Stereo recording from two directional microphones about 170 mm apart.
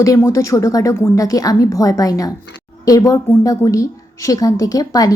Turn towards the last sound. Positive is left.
turn(degrees=20)  # may be behind; listen again after turning